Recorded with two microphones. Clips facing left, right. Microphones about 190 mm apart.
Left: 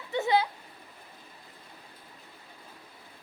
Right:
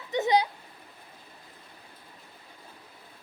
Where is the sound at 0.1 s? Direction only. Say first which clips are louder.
Right 2 dB; 20° right (ahead or behind).